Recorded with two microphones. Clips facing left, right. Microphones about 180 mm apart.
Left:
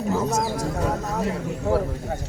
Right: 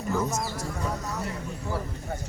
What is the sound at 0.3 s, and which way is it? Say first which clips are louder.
Speech: left 7 dB; 60° left (ahead or behind).